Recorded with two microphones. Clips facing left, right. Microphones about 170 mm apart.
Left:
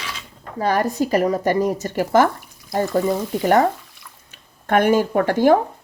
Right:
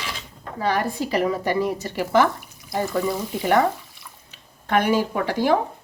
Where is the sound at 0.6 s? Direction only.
45° left (ahead or behind).